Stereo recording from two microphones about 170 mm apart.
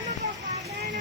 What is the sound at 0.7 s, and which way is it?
Music, 85° right.